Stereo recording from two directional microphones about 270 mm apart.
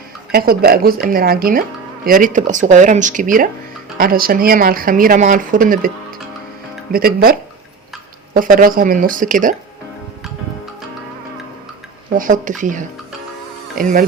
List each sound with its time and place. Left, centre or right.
0.3 s speech: right
6.9 s speech: right
12.1 s speech: right